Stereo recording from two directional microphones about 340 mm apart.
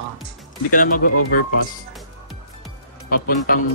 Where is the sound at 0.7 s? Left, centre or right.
Left.